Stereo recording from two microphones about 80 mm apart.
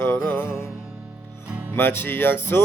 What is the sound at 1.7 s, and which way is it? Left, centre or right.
Music, left.